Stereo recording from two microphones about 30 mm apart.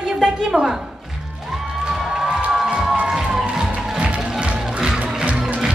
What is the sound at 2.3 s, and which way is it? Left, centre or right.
Music, right.